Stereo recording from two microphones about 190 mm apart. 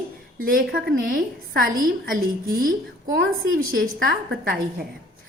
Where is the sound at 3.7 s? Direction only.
50° right (ahead or behind).